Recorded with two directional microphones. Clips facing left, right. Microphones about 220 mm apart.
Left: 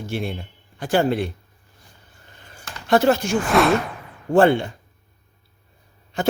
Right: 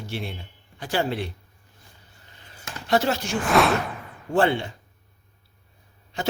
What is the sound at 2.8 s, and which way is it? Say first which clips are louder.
Speech: left 6 dB; 50° left (ahead or behind).